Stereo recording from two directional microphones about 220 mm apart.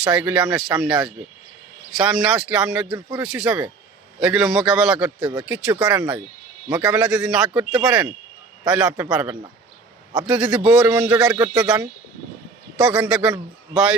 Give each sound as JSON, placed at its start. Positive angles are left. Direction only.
{"t": 0.0, "sound": "a man's voice", "side_deg": -5}
{"t": 11.4, "sound": "a man's voice", "side_deg": -15}
{"t": 12.7, "sound": "speech", "side_deg": -5}